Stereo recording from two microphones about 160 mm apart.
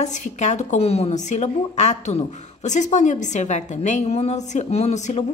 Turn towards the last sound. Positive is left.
turn(degrees=45)  # may be behind; listen again after turning